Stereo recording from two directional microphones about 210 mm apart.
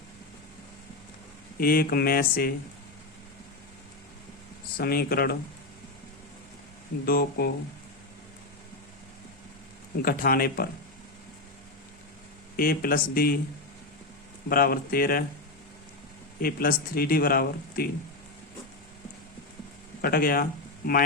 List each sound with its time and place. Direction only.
1.5 s speech: 45° left (ahead or behind)
4.8 s speech: 45° left (ahead or behind)
7.0 s speech: 45° left (ahead or behind)
10.0 s speech: 45° left (ahead or behind)
12.5 s speech: 45° left (ahead or behind)
14.5 s speech: 45° left (ahead or behind)
16.4 s speech: 45° left (ahead or behind)
20.0 s speech: 45° left (ahead or behind)